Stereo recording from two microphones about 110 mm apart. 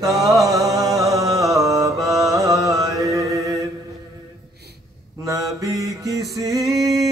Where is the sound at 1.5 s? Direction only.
30° right (ahead or behind).